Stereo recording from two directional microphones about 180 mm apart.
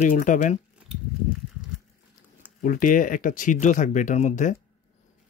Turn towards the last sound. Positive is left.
turn(degrees=40)  # may be behind; listen again after turning